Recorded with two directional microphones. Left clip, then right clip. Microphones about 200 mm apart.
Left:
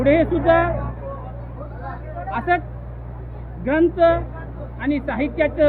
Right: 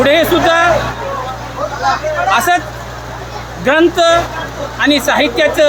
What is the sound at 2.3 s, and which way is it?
Speech, 10° right (ahead or behind).